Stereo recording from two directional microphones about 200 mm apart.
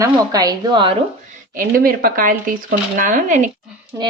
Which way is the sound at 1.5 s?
45° right (ahead or behind).